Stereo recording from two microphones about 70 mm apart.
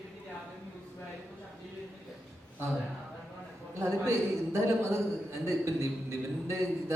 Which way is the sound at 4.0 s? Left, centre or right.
Right.